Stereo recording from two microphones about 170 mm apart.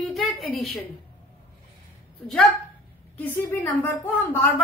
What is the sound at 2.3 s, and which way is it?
A woman's voice, centre (ahead or behind).